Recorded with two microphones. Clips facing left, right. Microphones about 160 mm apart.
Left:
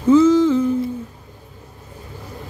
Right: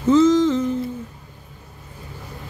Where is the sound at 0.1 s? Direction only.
10° left (ahead or behind).